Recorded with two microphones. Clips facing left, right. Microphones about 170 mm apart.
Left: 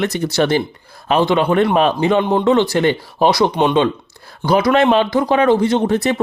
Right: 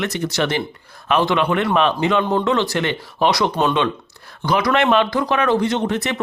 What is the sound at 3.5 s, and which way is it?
Speech, 15° left (ahead or behind).